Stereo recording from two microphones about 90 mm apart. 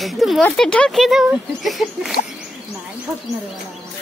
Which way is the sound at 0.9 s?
Centre (ahead or behind).